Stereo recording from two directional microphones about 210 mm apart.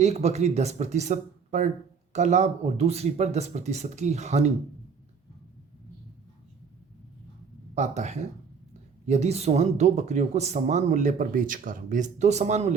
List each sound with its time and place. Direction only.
0.0 s speech: 30° right (ahead or behind)
7.8 s speech: 35° right (ahead or behind)